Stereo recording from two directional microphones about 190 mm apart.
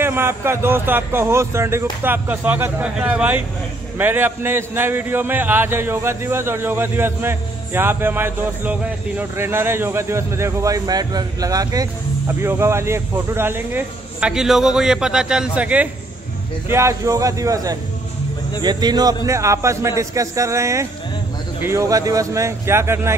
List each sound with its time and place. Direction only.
0.0 s a man's voice: 10° right (ahead or behind)